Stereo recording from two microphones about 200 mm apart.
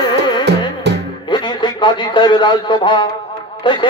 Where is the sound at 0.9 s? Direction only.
55° right (ahead or behind).